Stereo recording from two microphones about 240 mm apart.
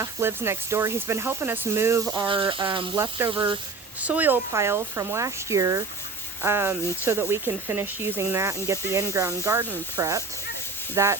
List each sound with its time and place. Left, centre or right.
0.0 s speech: centre